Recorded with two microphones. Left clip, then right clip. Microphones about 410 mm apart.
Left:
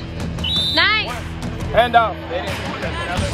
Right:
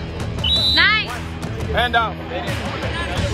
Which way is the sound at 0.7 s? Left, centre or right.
Centre.